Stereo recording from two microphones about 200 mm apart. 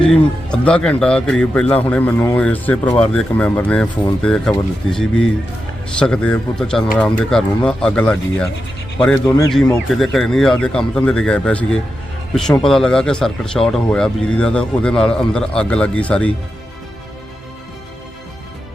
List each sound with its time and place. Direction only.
0.0 s speech: 5° left (ahead or behind)
9.7 s speech: centre (ahead or behind)